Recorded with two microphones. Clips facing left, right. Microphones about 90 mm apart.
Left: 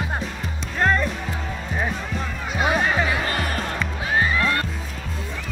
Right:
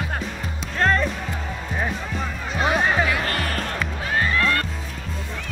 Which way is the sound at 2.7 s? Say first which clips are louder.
Right 2 dB; 5° right (ahead or behind).